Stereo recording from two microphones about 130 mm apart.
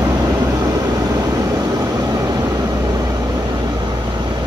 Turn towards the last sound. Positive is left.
turn(degrees=-30)  # may be behind; listen again after turning